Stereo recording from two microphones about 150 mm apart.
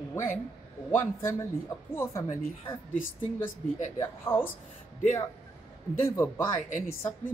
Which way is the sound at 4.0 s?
15° left (ahead or behind).